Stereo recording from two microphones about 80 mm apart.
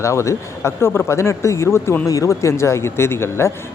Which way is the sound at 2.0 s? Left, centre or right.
Left.